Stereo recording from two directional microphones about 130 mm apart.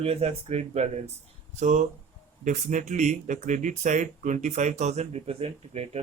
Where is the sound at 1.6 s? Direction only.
75° right (ahead or behind).